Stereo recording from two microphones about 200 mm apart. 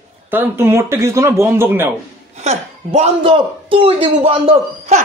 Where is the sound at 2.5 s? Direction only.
35° right (ahead or behind).